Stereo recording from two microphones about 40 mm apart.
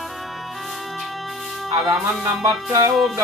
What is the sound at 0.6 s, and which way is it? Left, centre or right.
Music, centre.